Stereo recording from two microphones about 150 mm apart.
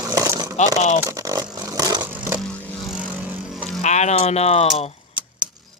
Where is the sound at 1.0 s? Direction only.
20° right (ahead or behind).